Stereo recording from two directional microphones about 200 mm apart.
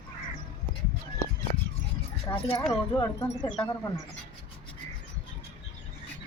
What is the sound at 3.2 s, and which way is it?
Speech, 10° left (ahead or behind).